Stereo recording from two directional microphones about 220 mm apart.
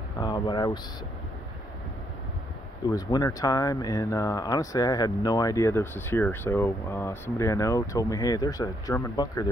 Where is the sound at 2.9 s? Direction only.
15° left (ahead or behind).